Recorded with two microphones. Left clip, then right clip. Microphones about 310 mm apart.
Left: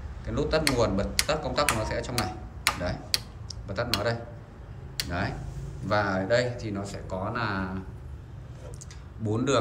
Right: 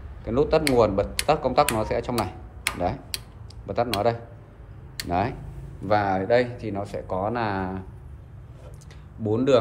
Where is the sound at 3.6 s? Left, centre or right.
Centre.